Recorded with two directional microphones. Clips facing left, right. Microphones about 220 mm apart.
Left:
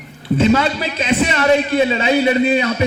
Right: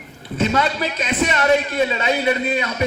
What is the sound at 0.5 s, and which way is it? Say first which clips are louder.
A man's voice: left 2 dB; 30° left (ahead or behind).